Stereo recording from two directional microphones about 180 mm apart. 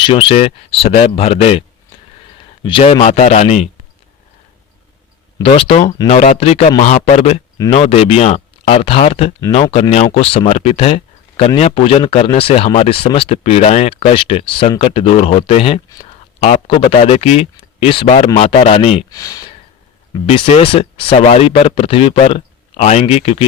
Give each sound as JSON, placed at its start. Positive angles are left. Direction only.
{"t": 0.0, "sound": "speech", "side_deg": 30}
{"t": 2.6, "sound": "speech", "side_deg": 30}
{"t": 5.4, "sound": "speech", "side_deg": 30}
{"t": 19.1, "sound": "speech", "side_deg": 20}
{"t": 20.2, "sound": "speech", "side_deg": 35}